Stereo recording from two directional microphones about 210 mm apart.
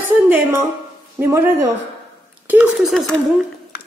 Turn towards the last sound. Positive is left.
turn(degrees=0)  # may be behind; listen again after turning